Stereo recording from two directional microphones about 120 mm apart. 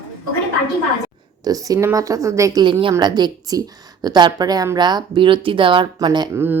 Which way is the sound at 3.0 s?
35° right (ahead or behind).